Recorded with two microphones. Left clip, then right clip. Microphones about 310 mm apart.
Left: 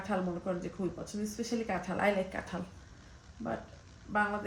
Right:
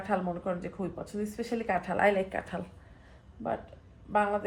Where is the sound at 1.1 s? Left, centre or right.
Centre.